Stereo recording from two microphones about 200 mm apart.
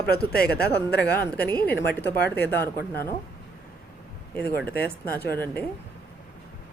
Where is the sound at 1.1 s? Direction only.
10° left (ahead or behind).